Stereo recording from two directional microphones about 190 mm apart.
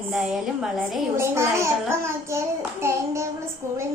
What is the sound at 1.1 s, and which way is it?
A woman's voice, 15° right (ahead or behind).